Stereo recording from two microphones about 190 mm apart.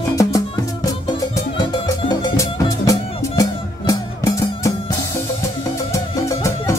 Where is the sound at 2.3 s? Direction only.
15° left (ahead or behind).